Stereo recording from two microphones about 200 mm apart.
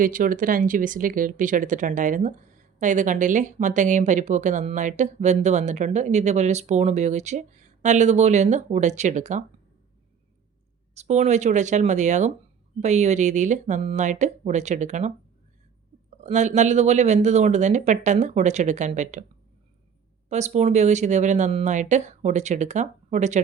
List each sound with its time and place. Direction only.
0.0 s speech: 45° right (ahead or behind)
10.9 s speech: 35° right (ahead or behind)
20.3 s speech: 35° right (ahead or behind)